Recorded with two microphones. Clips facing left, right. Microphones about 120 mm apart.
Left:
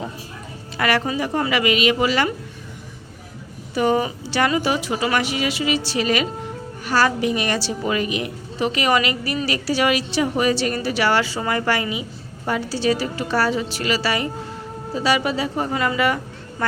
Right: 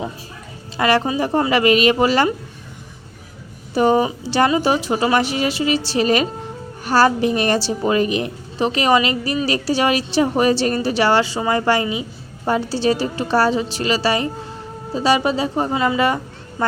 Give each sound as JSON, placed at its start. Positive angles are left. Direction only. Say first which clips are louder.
{"t": 0.8, "sound": "a woman's voice", "louder": "right 4 dB", "side_deg": -25}
{"t": 3.8, "sound": "a woman's voice", "louder": "right 4 dB", "side_deg": -30}